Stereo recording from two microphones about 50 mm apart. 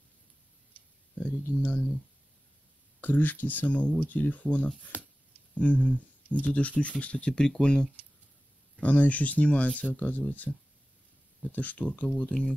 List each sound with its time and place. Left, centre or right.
1.1 s speech: left
3.0 s speech: left; by 7.9 s centre
8.7 s speech: left
10.5 s speech: centre
11.5 s speech: left